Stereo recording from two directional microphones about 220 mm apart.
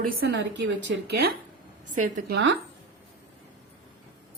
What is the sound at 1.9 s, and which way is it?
Speech, 40° right (ahead or behind).